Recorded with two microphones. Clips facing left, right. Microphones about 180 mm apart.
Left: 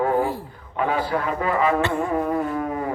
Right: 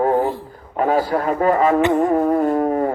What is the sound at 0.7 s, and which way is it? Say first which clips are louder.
Speech: right 5 dB; 40° right (ahead or behind).